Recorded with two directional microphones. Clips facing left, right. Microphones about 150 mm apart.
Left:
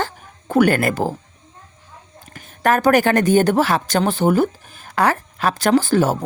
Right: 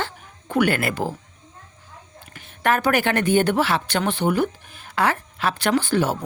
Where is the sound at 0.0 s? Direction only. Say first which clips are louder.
Left 4 dB; 40° left (ahead or behind).